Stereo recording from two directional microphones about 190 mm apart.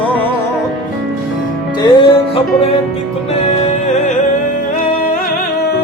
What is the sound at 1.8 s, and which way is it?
Music, 25° left (ahead or behind).